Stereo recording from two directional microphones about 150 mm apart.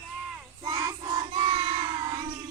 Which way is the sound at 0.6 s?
25° right (ahead or behind).